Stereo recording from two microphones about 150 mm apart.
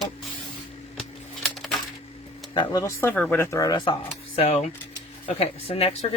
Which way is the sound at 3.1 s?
10° left (ahead or behind).